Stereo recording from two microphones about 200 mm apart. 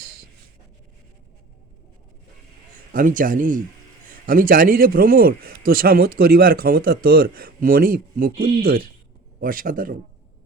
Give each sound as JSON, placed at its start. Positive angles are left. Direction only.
{"t": 2.9, "sound": "a man's voice", "side_deg": -40}